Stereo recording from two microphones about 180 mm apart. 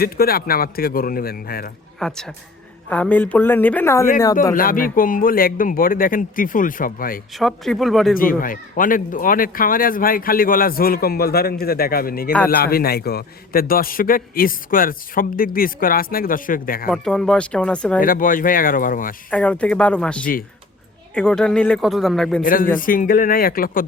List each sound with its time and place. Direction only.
0.0 s a man's voice: 55° left (ahead or behind)
2.0 s speech: 5° left (ahead or behind)
4.5 s a man's voice: 50° left (ahead or behind)
7.3 s speech: centre (ahead or behind)
8.2 s a man's voice: 50° left (ahead or behind)
16.9 s speech: 5° left (ahead or behind)
18.0 s a man's voice: 50° left (ahead or behind)
19.3 s speech: 5° left (ahead or behind)
22.4 s a man's voice: 50° left (ahead or behind)